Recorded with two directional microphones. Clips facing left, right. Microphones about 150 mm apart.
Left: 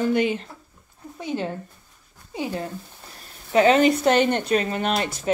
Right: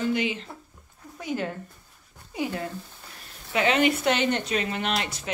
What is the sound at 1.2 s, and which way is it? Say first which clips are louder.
Speech: left 2 dB; 25° left (ahead or behind).